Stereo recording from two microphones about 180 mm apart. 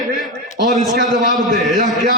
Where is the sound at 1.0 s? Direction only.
45° right (ahead or behind).